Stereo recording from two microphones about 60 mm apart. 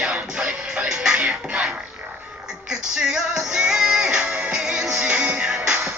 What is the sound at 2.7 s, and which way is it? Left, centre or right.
Music, centre.